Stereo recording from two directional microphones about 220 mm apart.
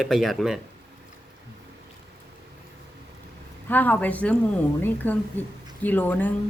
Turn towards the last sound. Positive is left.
turn(degrees=5)  # may be behind; listen again after turning